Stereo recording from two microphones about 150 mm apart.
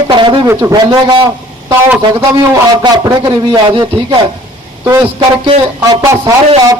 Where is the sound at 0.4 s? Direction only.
15° right (ahead or behind).